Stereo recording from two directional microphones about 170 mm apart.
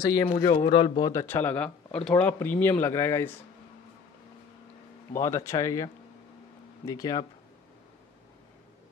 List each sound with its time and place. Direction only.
0.0 s speech: 20° left (ahead or behind)
5.1 s speech: 15° left (ahead or behind)
6.9 s speech: 20° left (ahead or behind)